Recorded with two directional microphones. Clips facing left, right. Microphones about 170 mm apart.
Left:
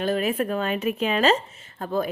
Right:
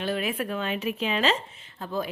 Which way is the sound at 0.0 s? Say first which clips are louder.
Left 5 dB; 40° left (ahead or behind).